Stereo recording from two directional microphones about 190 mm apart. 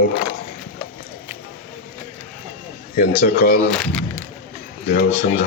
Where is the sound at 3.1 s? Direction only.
55° left (ahead or behind).